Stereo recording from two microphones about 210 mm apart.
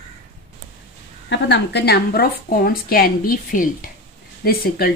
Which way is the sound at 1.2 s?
55° left (ahead or behind).